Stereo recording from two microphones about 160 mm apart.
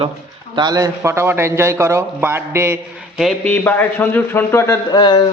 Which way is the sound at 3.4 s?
10° left (ahead or behind).